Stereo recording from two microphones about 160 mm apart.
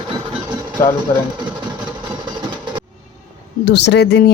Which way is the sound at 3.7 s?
90° left.